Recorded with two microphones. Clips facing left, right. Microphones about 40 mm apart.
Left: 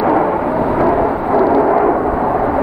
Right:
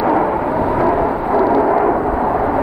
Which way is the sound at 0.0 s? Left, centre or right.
Centre.